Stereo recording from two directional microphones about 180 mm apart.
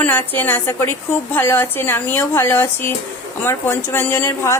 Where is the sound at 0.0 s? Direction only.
10° left (ahead or behind).